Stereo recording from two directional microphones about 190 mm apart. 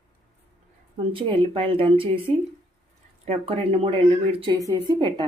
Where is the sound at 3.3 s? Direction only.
30° right (ahead or behind).